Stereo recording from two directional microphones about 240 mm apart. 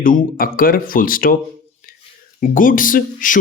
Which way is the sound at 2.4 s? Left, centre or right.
Left.